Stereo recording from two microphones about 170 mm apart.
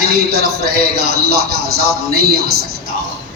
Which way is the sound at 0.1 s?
65° right (ahead or behind).